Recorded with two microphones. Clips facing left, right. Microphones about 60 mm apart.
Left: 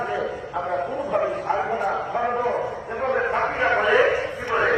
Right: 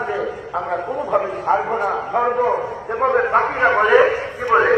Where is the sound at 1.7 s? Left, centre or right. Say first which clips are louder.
Right 4 dB; right.